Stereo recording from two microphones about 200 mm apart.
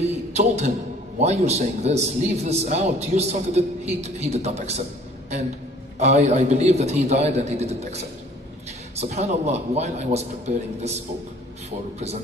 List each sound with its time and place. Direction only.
0.0 s a sound: 35° right (ahead or behind)
1.2 s a man's voice: 35° right (ahead or behind)
5.9 s a man's voice: 35° right (ahead or behind)
9.1 s a man's voice: 35° right (ahead or behind)